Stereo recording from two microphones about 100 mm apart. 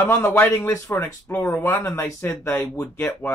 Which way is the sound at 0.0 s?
20° left (ahead or behind).